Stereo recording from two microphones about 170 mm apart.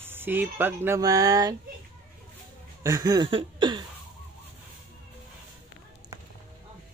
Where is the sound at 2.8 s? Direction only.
20° right (ahead or behind).